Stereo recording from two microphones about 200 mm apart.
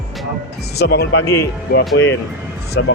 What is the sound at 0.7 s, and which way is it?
A woman's voice, 55° left (ahead or behind).